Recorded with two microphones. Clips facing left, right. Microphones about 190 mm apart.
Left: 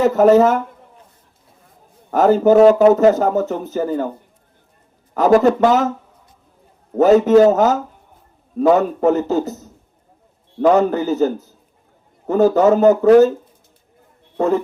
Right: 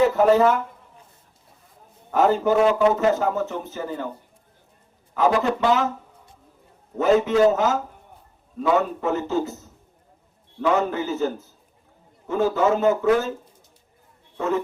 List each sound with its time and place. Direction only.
0.0 s speech: 45° left (ahead or behind)
2.0 s speech: 40° left (ahead or behind)
5.1 s speech: 40° left (ahead or behind)
6.9 s speech: 40° left (ahead or behind)
10.6 s speech: 40° left (ahead or behind)
14.3 s speech: 35° left (ahead or behind)